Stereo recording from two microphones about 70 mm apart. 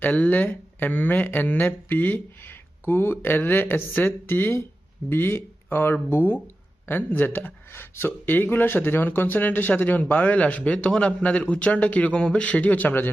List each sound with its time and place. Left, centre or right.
0.0 s speech: left